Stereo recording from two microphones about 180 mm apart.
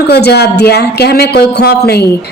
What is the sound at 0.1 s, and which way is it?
A woman's voice, 65° left (ahead or behind).